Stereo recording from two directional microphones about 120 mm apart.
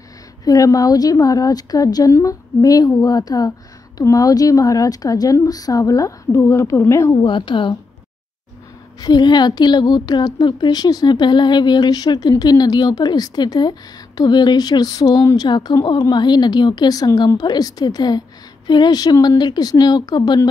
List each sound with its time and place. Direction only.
0.5 s a woman's voice: 30° left (ahead or behind)
7.2 s a woman's voice: 40° left (ahead or behind)
9.0 s a woman's voice: 35° left (ahead or behind)